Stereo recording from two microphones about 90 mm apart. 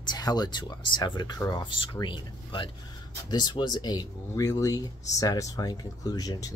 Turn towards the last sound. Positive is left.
turn(degrees=40)  # may be behind; listen again after turning